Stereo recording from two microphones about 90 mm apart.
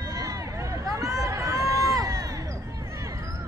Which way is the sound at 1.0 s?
35° right (ahead or behind).